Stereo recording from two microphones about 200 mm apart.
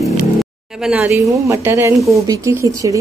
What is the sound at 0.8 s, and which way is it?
Speech, 5° right (ahead or behind).